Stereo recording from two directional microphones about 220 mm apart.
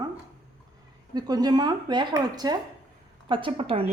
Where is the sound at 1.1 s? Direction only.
20° right (ahead or behind).